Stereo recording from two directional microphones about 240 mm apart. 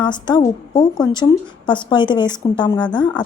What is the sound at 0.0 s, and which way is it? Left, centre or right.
A woman's voice, centre.